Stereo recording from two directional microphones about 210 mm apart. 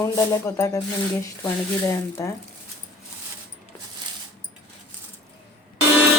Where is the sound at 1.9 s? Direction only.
15° left (ahead or behind).